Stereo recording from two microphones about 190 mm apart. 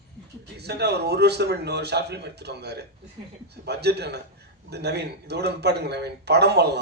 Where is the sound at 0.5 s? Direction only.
60° right (ahead or behind).